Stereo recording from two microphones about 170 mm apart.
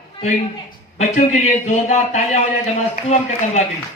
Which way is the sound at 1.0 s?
45° left (ahead or behind).